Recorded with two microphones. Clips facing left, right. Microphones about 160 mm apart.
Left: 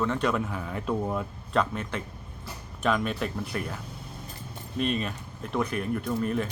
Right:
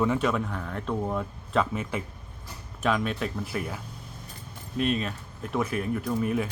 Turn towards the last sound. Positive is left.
turn(degrees=-5)  # may be behind; listen again after turning